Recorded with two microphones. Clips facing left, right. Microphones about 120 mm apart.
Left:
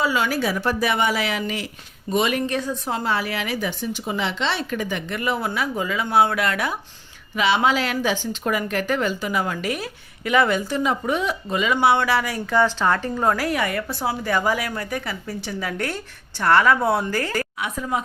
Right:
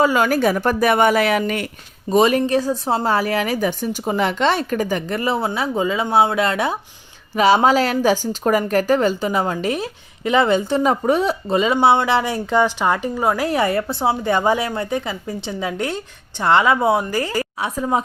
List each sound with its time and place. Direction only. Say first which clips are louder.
0.0 s a woman's voice: right 6 dB; 45° right (ahead or behind)
2.0 s speech: right 6 dB; 35° right (ahead or behind)
7.3 s speech: right 6 dB; 40° right (ahead or behind)
10.8 s speech: right 5 dB; 40° right (ahead or behind); by 13.4 s 15° right (ahead or behind)
13.4 s speech: right 5 dB; 30° right (ahead or behind); by 17.4 s 15° right (ahead or behind)
17.6 s speech: right 8 dB; 30° right (ahead or behind)